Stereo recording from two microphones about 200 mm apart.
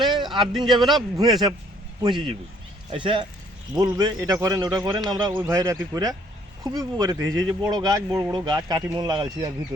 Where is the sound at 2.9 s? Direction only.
25° right (ahead or behind).